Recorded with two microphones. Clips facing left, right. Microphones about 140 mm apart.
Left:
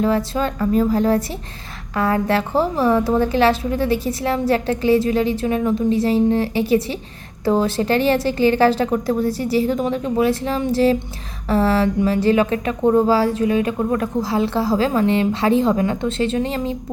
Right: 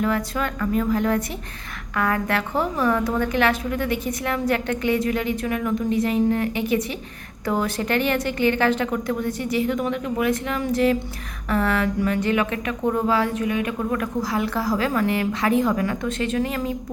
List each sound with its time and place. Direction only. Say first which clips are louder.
0.0 s a woman's voice: left 5 dB; 30° left (ahead or behind)